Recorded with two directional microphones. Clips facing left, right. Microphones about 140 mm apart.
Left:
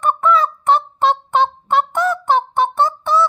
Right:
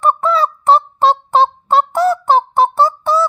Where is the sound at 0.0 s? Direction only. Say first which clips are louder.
Right 1 dB; 35° right (ahead or behind).